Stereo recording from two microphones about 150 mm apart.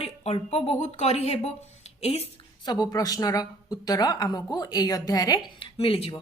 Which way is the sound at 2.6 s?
25° left (ahead or behind).